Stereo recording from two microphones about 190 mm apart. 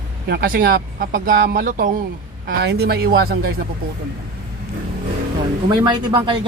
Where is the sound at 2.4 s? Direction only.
55° right (ahead or behind).